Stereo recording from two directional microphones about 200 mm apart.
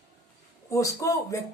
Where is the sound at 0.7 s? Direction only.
15° left (ahead or behind).